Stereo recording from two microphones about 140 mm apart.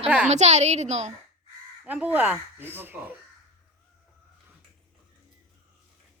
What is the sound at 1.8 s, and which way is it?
Speech, 10° right (ahead or behind).